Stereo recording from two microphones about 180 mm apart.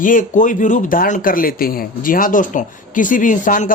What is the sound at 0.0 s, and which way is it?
Speech, 50° left (ahead or behind).